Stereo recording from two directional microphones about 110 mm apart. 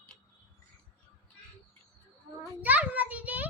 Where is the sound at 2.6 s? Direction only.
15° right (ahead or behind).